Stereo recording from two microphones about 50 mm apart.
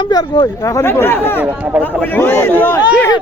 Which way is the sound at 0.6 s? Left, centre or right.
Left.